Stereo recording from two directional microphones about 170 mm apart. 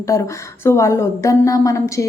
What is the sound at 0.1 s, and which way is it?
A woman's voice, 15° left (ahead or behind).